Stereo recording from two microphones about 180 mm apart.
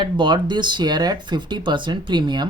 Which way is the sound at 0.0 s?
25° right (ahead or behind).